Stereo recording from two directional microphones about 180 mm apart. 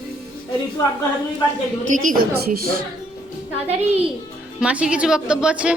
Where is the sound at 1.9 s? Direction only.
45° right (ahead or behind).